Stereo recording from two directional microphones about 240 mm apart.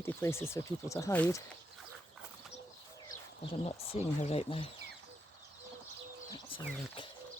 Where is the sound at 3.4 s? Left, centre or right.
Left.